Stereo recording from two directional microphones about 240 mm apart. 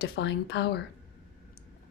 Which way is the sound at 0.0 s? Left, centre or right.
Left.